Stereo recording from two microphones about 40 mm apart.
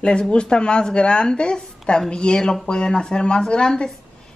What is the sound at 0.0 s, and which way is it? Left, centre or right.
Speech, left.